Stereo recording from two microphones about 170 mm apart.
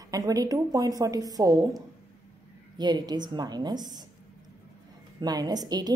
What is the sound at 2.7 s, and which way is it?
A woman's voice, 25° right (ahead or behind).